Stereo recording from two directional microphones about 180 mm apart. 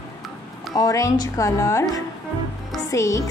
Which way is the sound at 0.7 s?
20° left (ahead or behind).